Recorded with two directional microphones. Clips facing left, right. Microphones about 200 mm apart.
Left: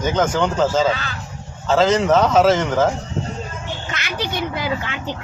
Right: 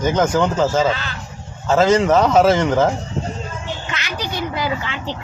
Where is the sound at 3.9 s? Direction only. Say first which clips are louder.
Right 1 dB; 55° left (ahead or behind).